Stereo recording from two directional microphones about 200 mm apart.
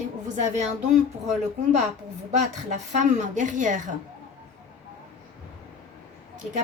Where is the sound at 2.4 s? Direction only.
40° right (ahead or behind).